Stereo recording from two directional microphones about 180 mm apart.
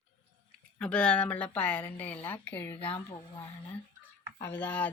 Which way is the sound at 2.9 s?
25° left (ahead or behind).